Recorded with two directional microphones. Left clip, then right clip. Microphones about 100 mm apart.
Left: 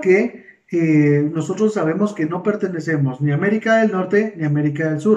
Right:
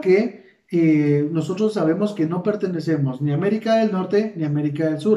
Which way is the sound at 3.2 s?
25° right (ahead or behind).